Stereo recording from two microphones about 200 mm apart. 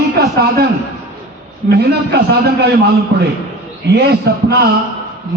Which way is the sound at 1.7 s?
55° right (ahead or behind).